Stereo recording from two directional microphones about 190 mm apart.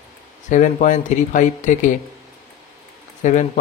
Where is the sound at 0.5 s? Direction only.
40° left (ahead or behind).